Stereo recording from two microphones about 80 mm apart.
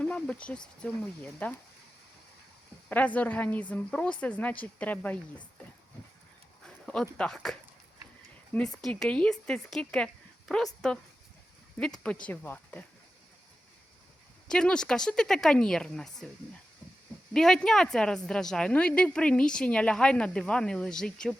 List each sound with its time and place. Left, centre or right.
0.0 s a woman's voice: centre
2.9 s a woman's voice: centre
6.7 s a sound: centre
7.2 s a woman's voice: centre
14.4 s a woman's voice: centre
17.3 s a woman's voice: centre